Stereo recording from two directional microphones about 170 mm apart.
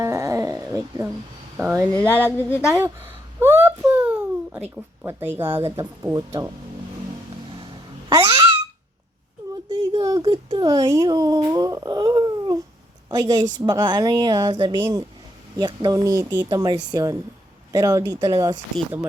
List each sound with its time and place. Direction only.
0.0 s dog: 15° right (ahead or behind)
1.5 s speech: 15° right (ahead or behind)
2.0 s a sound: 10° left (ahead or behind)
2.6 s speech: 10° right (ahead or behind)
3.4 s a sound: 15° right (ahead or behind)
5.4 s speech: 15° right (ahead or behind)
8.1 s a child's voice: 20° right (ahead or behind)
9.6 s a sound: 25° right (ahead or behind)
13.1 s a woman's voice: 20° right (ahead or behind)